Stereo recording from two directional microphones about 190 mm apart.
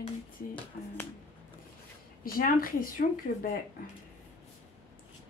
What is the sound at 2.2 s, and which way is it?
Speech, 50° left (ahead or behind).